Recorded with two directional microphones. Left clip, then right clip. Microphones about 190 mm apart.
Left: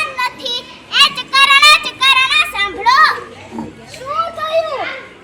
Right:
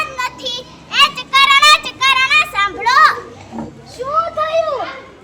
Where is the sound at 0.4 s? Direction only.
25° right (ahead or behind).